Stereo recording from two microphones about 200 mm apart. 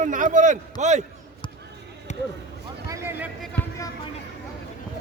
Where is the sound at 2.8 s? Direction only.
15° right (ahead or behind).